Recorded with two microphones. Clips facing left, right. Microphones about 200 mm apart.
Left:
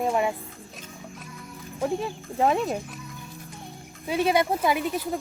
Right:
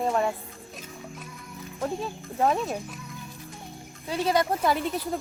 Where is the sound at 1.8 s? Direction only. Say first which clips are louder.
Left 3 dB; 15° left (ahead or behind).